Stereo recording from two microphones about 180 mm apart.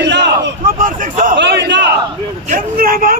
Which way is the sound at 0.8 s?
50° right (ahead or behind).